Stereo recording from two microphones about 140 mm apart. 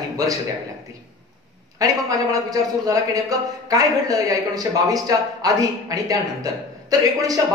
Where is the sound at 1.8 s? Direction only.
25° right (ahead or behind).